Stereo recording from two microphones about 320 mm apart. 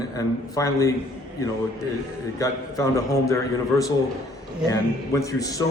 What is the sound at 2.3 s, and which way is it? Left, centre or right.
A man's voice, centre.